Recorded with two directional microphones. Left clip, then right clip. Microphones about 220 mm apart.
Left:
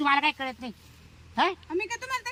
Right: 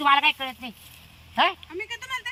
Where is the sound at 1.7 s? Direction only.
30° left (ahead or behind).